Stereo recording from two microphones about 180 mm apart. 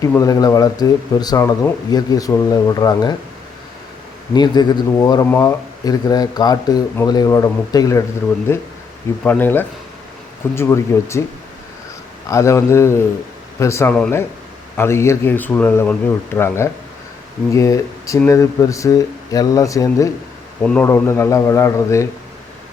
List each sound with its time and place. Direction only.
0.0 s speech: 20° left (ahead or behind)
4.4 s speech: 25° left (ahead or behind)
12.3 s speech: 15° left (ahead or behind)